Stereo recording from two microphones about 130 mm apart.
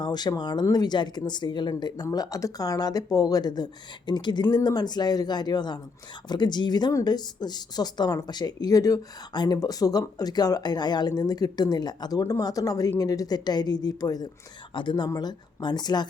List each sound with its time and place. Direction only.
0.0 s a woman's voice: 30° left (ahead or behind)